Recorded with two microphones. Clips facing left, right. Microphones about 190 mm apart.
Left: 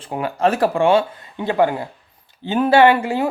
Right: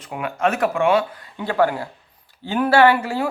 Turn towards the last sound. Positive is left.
turn(degrees=20)  # may be behind; listen again after turning